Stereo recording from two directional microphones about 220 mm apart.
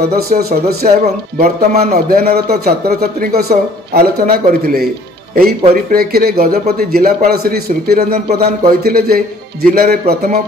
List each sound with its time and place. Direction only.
0.1 s a man's voice: 45° right (ahead or behind)
5.9 s a man's voice: 45° right (ahead or behind)